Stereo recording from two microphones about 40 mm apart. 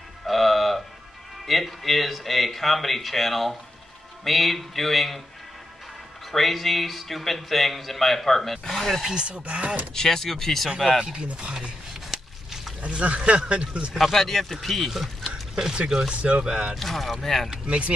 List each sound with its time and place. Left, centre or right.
0.3 s music: centre
1.4 s speech: centre
6.3 s speech: centre
9.3 s speech: right
9.9 s speech: centre
11.0 s speech: centre
12.1 s a sound: centre
12.8 s speech: right
14.1 s speech: centre
15.5 s speech: centre
16.1 s speech: right
16.7 s speech: centre
17.6 s speech: right